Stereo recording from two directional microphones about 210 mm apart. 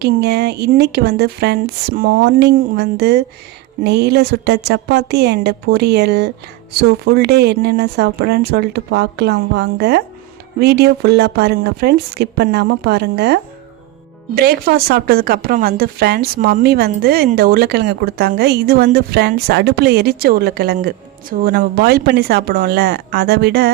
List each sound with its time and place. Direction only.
0.0 s speech: 50° right (ahead or behind)